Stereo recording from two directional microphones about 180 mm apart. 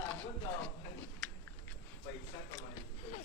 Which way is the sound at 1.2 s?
5° left (ahead or behind).